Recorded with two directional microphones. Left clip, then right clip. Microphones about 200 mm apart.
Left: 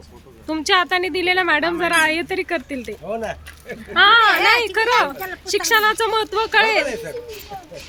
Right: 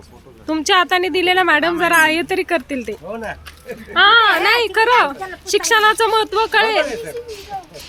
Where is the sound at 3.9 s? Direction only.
10° right (ahead or behind).